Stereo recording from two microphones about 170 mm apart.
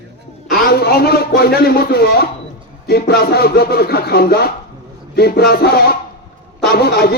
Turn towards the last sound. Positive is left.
turn(degrees=65)  # may be behind; listen again after turning